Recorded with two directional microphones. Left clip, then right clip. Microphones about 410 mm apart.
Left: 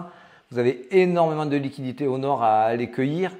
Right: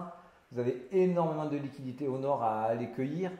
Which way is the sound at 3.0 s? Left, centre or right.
Left.